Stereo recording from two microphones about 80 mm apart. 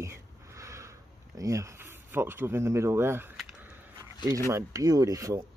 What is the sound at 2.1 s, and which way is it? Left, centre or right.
Speech, right.